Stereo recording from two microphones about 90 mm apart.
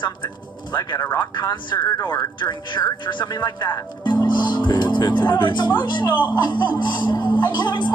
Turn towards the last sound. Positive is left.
turn(degrees=55)  # may be behind; listen again after turning